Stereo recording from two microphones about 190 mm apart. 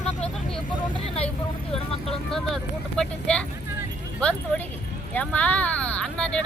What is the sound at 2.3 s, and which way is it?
Vehicle, centre (ahead or behind).